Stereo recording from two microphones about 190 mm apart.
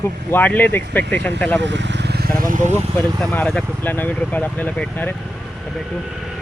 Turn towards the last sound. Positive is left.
turn(degrees=10)  # may be behind; listen again after turning